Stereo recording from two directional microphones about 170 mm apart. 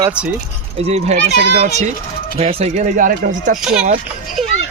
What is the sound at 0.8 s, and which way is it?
Speech, 40° right (ahead or behind).